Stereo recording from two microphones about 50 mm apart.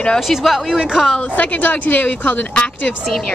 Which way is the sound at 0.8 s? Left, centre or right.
Centre.